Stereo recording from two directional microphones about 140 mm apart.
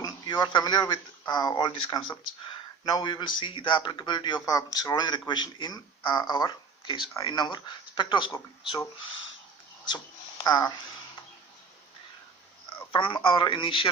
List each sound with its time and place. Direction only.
0.0 s speech: 30° left (ahead or behind)
10.4 s speech: 25° left (ahead or behind)
12.9 s speech: 35° left (ahead or behind)